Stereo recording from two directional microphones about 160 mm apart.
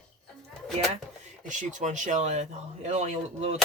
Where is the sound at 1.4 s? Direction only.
50° right (ahead or behind).